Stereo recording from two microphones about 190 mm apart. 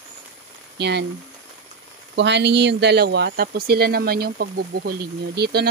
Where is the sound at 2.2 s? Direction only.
65° right (ahead or behind).